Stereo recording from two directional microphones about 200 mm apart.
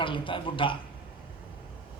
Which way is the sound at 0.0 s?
25° left (ahead or behind).